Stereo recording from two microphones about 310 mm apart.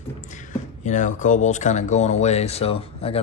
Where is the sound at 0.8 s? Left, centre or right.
Left.